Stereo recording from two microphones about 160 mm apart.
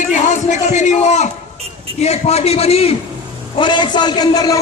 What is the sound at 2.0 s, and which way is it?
Speech, 40° left (ahead or behind).